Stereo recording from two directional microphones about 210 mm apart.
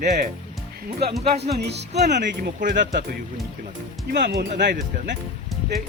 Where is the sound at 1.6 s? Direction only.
50° right (ahead or behind).